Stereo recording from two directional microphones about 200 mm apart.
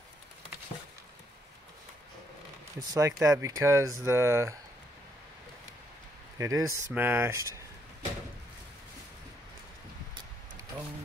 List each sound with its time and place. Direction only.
2.8 s speech: 15° right (ahead or behind)
6.3 s speech: 15° right (ahead or behind)